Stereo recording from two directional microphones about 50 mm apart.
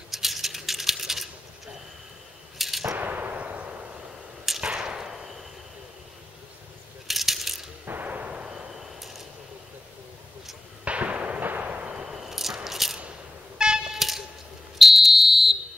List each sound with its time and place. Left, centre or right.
0.1 s a sound: centre
2.6 s gunshot: centre
3.0 s a sound: right
4.6 s whip: centre
7.1 s coin: centre
7.8 s artillery fire: right
8.1 s artillery fire: right
8.5 s a sound: centre
10.9 s fireworks: right
11.6 s artillery fire: right
11.9 s a sound: centre
13.9 s vehicle: centre
14.8 s fire alarm: centre